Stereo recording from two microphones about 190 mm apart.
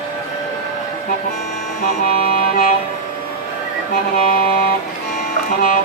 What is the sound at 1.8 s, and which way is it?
Music, 50° left (ahead or behind).